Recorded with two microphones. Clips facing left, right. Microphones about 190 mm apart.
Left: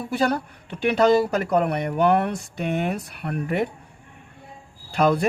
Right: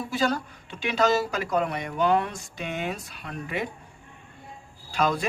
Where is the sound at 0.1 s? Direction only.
60° left (ahead or behind).